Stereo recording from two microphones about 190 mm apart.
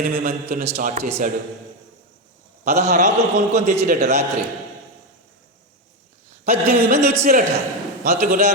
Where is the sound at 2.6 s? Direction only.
35° right (ahead or behind).